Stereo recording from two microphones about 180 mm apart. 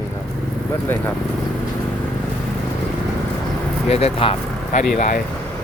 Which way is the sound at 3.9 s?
35° left (ahead or behind).